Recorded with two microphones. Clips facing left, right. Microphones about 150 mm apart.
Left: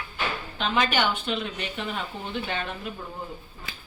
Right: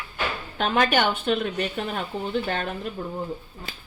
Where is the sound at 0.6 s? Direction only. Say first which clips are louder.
Right 4 dB; 50° right (ahead or behind).